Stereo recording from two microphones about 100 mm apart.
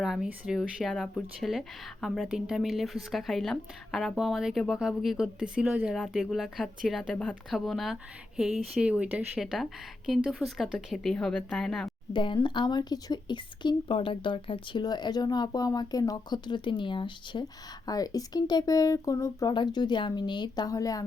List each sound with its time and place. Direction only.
0.0 s speech: centre (ahead or behind)
9.4 s speech: centre (ahead or behind)
12.1 s speech: 55° left (ahead or behind)
17.8 s speech: 40° left (ahead or behind)
19.5 s speech: 45° left (ahead or behind)